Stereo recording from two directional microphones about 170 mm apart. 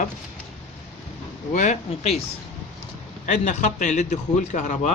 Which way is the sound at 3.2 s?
45° left (ahead or behind).